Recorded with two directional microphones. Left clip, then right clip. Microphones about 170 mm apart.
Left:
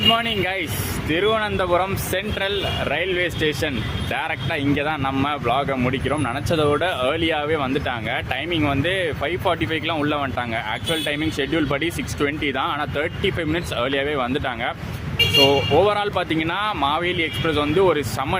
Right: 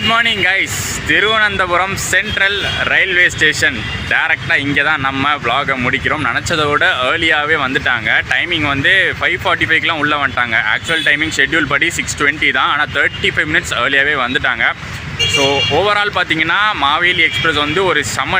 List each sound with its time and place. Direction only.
0.1 s speech: 5° left (ahead or behind)
15.4 s speech: 25° right (ahead or behind)
15.8 s speech: 5° left (ahead or behind)